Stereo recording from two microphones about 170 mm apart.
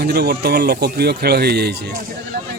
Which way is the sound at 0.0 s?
70° right (ahead or behind).